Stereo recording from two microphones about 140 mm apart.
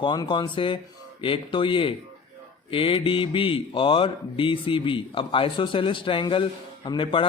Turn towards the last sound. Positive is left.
turn(degrees=35)  # may be behind; listen again after turning